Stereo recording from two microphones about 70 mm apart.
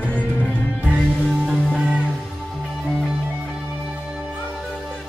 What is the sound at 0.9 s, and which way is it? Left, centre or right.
Music, centre.